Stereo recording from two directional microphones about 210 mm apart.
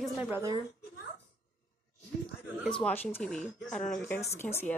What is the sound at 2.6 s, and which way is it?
Speech, 5° left (ahead or behind).